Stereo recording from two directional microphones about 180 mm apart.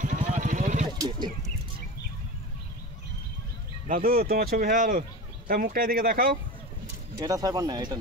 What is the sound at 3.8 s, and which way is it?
Speech, 50° right (ahead or behind).